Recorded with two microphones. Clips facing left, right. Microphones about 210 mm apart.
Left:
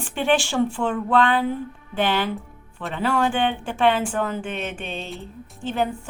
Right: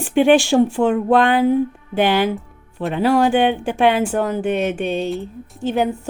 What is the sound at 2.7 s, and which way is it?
Speech, 40° right (ahead or behind).